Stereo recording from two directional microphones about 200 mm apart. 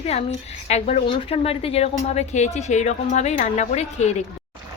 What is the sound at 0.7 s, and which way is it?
A woman's voice, 30° left (ahead or behind).